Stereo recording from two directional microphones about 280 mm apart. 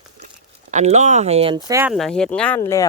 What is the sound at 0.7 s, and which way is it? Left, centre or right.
Speech, right.